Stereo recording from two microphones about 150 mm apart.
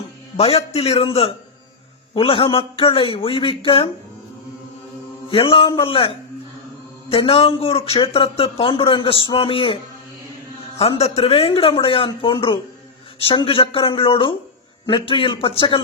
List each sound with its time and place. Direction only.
0.3 s speech: 40° left (ahead or behind)
5.3 s speech: 35° left (ahead or behind)
7.1 s speech: 40° left (ahead or behind)
10.8 s speech: 40° left (ahead or behind)